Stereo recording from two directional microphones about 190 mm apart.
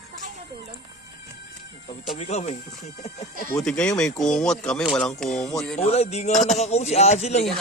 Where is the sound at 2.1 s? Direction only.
35° left (ahead or behind).